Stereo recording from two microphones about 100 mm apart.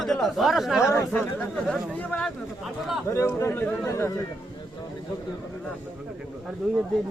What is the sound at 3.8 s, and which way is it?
Speech, 30° left (ahead or behind).